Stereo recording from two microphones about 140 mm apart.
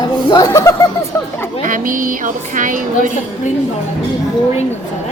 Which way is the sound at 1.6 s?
70° right (ahead or behind).